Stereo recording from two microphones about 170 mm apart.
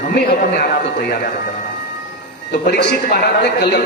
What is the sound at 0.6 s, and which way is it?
Speech, 75° left (ahead or behind).